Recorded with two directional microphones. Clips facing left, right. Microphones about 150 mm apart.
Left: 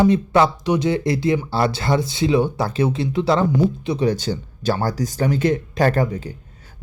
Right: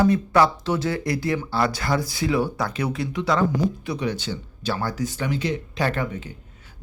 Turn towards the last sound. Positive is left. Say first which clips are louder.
# left 6 dB
turn(degrees=35)  # may be behind; listen again after turning